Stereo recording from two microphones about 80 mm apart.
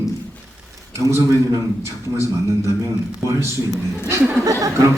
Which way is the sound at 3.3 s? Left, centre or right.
Right.